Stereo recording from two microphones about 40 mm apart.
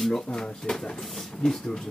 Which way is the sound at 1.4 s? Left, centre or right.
Left.